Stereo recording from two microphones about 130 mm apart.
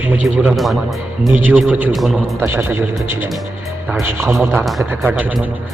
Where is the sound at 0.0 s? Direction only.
10° right (ahead or behind).